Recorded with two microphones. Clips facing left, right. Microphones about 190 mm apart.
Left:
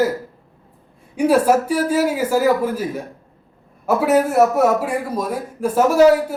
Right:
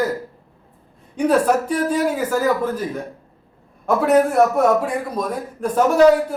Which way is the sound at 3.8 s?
5° left (ahead or behind).